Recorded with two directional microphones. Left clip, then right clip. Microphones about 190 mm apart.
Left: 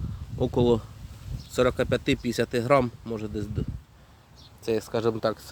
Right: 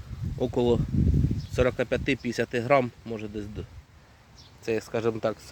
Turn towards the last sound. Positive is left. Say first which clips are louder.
# left 1 dB
turn(degrees=0)  # may be behind; listen again after turning